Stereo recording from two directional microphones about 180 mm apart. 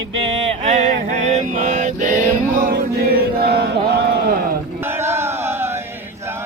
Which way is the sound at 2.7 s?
60° right (ahead or behind).